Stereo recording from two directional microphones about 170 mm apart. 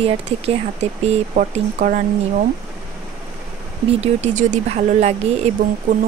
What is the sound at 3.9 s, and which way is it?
Speech, 40° right (ahead or behind).